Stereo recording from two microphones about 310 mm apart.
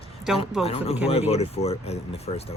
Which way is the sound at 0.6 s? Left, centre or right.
Centre.